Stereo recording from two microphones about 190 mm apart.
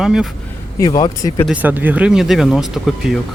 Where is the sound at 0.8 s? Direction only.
20° left (ahead or behind).